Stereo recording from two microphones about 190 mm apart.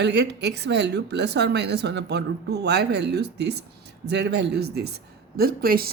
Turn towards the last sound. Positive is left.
turn(degrees=-50)  # may be behind; listen again after turning